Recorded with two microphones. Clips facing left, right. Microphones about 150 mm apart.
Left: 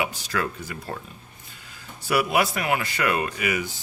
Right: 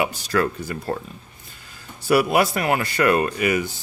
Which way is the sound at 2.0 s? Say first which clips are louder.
Right 4 dB; 35° right (ahead or behind).